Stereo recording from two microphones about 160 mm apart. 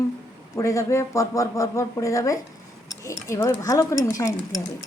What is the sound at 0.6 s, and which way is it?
Speech, 20° left (ahead or behind).